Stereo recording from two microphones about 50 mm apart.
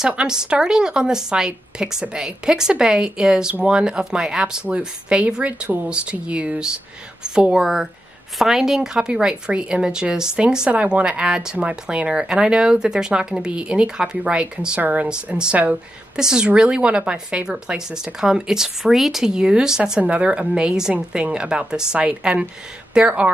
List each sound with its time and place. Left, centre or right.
0.1 s speech: centre
4.6 s speech: right
7.5 s speech: centre; by 15.8 s right
16.2 s speech: centre
20.0 s speech: right